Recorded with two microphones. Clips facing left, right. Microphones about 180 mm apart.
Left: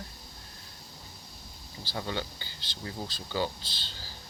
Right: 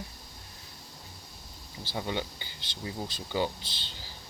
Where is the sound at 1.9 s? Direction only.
20° right (ahead or behind).